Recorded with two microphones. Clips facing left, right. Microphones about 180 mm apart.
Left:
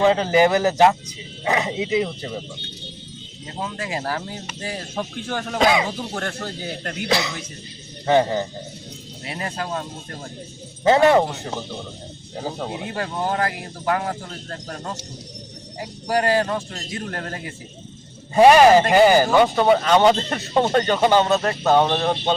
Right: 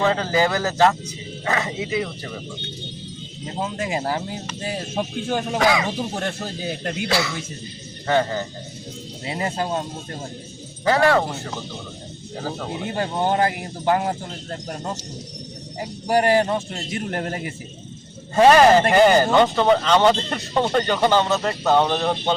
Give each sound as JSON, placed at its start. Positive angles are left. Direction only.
{"t": 0.0, "sound": "a man's voice", "side_deg": 15}
{"t": 3.6, "sound": "a man's voice", "side_deg": -20}
{"t": 5.5, "sound": "speech", "side_deg": 20}
{"t": 6.1, "sound": "a man's voice", "side_deg": -20}
{"t": 7.1, "sound": "speech", "side_deg": 20}
{"t": 9.2, "sound": "a man's voice", "side_deg": -25}
{"t": 10.8, "sound": "speech", "side_deg": 20}
{"t": 12.9, "sound": "a man's voice", "side_deg": -25}
{"t": 16.0, "sound": "a man's voice", "side_deg": -25}
{"t": 18.3, "sound": "a man's voice", "side_deg": 10}